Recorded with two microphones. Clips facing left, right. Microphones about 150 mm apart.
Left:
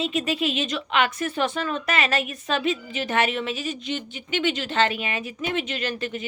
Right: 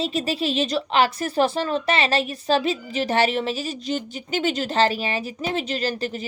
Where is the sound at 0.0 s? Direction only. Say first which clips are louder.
Right 1 dB; 35° right (ahead or behind).